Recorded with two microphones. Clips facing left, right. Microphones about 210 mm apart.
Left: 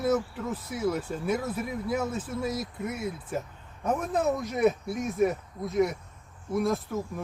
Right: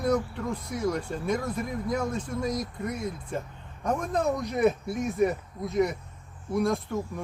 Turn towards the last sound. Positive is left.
turn(degrees=0)  # may be behind; listen again after turning